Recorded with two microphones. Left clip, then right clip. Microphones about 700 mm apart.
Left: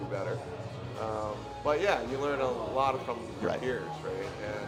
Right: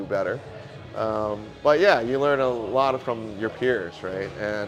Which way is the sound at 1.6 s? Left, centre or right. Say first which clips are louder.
Right 10 dB; right.